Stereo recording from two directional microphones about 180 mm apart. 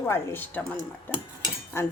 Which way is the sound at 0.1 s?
10° left (ahead or behind).